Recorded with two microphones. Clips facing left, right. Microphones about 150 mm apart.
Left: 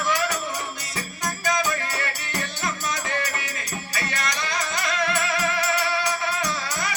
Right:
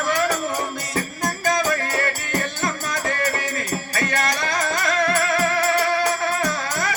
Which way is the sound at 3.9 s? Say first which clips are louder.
Right 5 dB; 50° right (ahead or behind).